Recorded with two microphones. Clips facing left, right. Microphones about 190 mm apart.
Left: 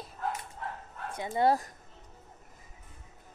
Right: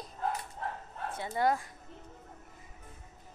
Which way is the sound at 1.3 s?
25° left (ahead or behind).